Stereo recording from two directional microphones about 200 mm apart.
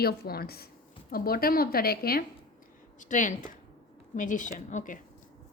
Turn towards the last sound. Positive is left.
turn(degrees=40)  # may be behind; listen again after turning